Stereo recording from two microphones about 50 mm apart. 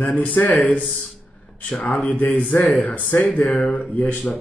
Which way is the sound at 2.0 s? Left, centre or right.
Left.